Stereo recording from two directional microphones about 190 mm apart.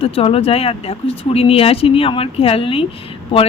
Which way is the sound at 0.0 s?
30° left (ahead or behind).